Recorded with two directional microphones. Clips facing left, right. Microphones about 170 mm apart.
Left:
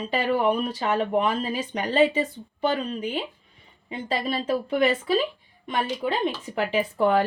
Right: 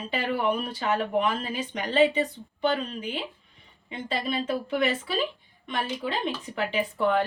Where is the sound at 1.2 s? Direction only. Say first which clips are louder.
Left 2 dB; 40° left (ahead or behind).